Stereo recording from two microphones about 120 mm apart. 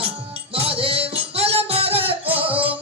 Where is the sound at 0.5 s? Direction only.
55° right (ahead or behind).